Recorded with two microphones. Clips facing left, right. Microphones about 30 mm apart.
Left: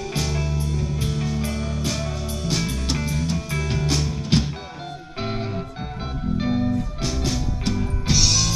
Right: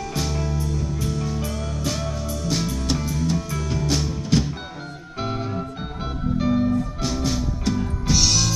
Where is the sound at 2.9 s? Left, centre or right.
Left.